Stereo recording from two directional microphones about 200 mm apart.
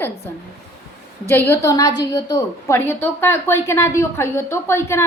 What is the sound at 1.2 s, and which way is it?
A woman's voice, 10° left (ahead or behind).